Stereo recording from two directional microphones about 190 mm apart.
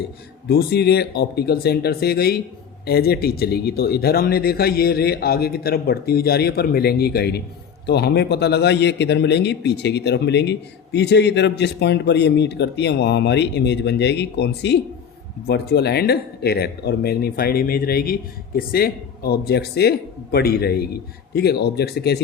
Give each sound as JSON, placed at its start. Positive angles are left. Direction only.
{"t": 0.4, "sound": "a man's voice", "side_deg": 55}